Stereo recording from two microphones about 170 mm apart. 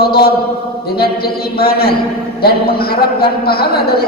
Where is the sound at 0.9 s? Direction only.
65° left (ahead or behind).